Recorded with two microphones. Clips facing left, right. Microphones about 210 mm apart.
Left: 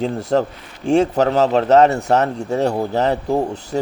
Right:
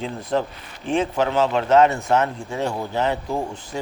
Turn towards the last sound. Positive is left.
turn(degrees=40)  # may be behind; listen again after turning